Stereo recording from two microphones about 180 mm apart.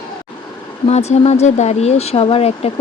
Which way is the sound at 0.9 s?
35° left (ahead or behind).